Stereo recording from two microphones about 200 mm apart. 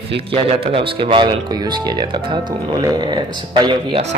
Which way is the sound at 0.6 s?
25° right (ahead or behind).